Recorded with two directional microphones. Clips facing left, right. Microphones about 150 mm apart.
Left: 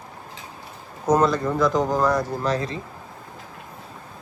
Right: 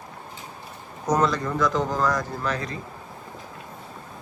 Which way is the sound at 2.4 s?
30° left (ahead or behind).